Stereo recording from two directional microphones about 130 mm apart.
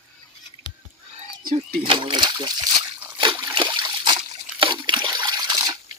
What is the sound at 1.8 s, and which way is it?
Speech, 40° right (ahead or behind).